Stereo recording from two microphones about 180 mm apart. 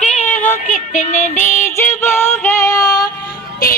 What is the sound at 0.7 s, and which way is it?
Child singing, 45° left (ahead or behind).